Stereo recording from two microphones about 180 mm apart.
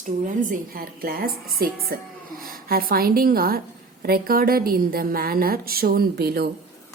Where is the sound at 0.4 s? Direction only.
50° right (ahead or behind).